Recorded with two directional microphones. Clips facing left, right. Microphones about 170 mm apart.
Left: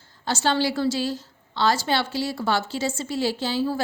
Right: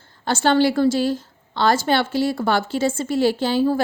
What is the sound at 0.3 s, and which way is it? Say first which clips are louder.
A woman's voice: right 6 dB; 55° right (ahead or behind).